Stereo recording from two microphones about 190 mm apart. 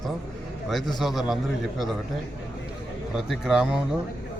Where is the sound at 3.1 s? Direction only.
5° right (ahead or behind).